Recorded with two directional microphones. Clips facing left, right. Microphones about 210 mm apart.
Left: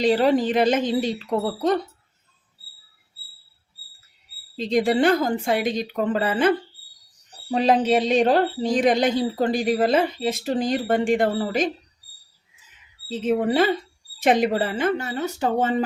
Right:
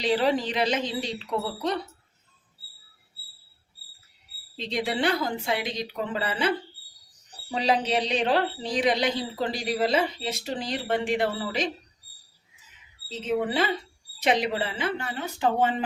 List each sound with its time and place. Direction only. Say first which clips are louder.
0.0 s speech: left 6 dB; 45° left (ahead or behind)
4.5 s speech: left 8 dB; 45° left (ahead or behind)
7.5 s speech: left 6 dB; 50° left (ahead or behind)
13.1 s speech: left 5 dB; 50° left (ahead or behind)